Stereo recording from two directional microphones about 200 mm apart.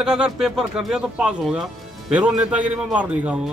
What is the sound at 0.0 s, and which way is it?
Speech, 5° right (ahead or behind).